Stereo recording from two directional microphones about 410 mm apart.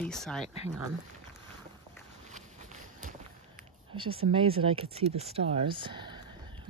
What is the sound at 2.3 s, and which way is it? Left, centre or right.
Walk, centre.